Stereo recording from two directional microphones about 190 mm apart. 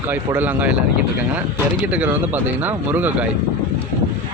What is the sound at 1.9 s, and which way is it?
Speech, 5° right (ahead or behind).